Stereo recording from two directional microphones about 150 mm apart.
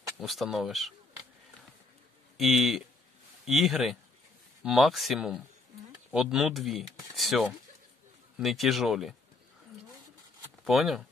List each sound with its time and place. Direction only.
0.2 s speech: centre (ahead or behind)
2.3 s speech: centre (ahead or behind)
7.2 s a sound: centre (ahead or behind)
8.4 s speech: centre (ahead or behind)
10.6 s speech: centre (ahead or behind)